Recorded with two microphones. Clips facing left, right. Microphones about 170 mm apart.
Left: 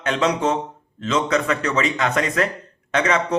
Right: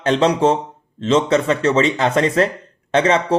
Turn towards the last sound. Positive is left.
turn(degrees=-30)  # may be behind; listen again after turning